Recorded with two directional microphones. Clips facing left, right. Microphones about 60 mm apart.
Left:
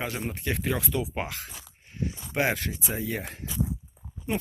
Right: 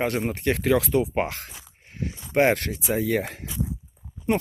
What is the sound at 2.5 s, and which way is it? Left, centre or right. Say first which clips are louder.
Speech: right 3 dB; right.